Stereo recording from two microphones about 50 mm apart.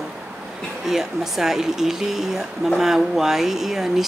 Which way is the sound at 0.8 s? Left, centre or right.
Centre.